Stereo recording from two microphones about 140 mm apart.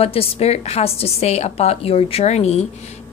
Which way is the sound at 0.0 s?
45° left (ahead or behind).